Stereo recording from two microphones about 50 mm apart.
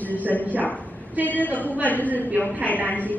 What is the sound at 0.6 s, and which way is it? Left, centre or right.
Speech, left.